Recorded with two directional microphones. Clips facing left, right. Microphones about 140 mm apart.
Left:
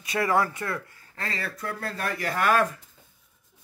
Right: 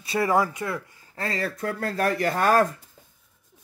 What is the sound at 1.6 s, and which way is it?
Speech, 45° right (ahead or behind).